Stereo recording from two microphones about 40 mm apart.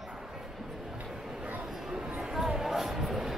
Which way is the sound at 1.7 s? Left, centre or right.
Centre.